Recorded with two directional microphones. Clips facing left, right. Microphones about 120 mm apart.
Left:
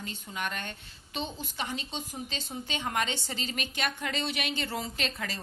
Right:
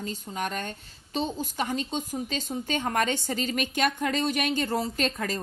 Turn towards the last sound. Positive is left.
turn(degrees=-45)  # may be behind; listen again after turning